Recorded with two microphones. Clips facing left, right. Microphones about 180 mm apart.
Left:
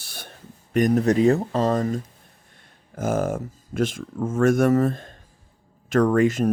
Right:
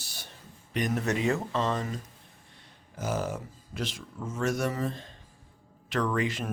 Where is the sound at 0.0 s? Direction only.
60° left (ahead or behind).